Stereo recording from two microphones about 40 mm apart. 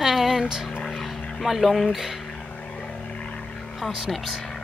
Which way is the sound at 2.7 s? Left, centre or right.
Left.